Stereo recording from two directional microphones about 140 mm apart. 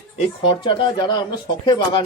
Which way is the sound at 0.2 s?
40° left (ahead or behind).